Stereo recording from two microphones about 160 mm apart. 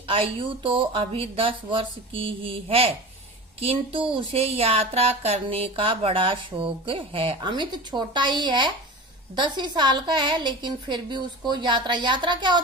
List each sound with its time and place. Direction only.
0.1 s a woman's voice: 35° right (ahead or behind)